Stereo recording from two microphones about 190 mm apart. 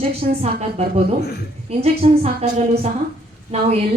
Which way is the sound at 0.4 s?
35° right (ahead or behind).